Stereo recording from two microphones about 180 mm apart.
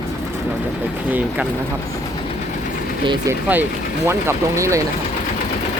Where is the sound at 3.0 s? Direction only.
25° right (ahead or behind).